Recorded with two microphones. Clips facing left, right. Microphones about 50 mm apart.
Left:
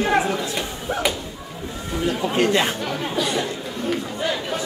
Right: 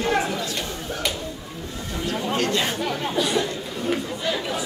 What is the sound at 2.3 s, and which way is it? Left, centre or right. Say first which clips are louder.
Speech: left 4 dB; left.